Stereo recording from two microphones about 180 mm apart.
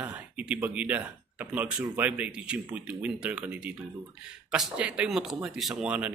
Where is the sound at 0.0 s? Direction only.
10° right (ahead or behind).